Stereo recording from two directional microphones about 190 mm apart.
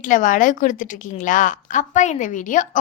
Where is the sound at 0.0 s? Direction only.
45° left (ahead or behind).